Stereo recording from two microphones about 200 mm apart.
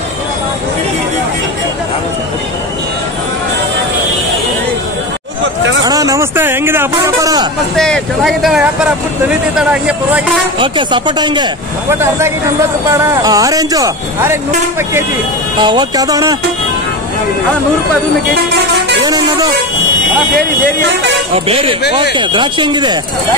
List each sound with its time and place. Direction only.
5.4 s hubbub: 65° right (ahead or behind)
5.9 s a sound: 15° right (ahead or behind)
7.7 s speech: 5° left (ahead or behind)
10.6 s speech: 25° right (ahead or behind)
15.6 s speech: 20° right (ahead or behind)
19.0 s speech: 20° right (ahead or behind)
21.5 s speech: 25° right (ahead or behind)